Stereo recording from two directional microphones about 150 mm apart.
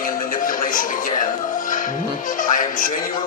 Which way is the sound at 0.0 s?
70° left (ahead or behind).